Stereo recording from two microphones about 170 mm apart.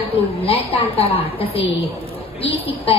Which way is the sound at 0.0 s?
35° left (ahead or behind).